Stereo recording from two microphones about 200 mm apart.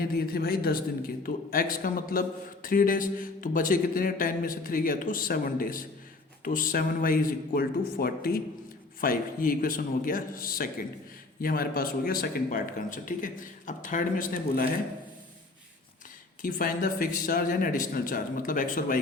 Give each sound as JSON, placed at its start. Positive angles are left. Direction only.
{"t": 0.0, "sound": "a man's voice", "side_deg": 50}
{"t": 16.4, "sound": "a man's voice", "side_deg": 45}